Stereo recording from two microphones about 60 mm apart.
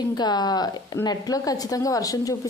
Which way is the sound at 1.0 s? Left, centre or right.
Left.